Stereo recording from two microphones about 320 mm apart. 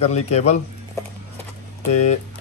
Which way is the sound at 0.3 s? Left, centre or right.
Centre.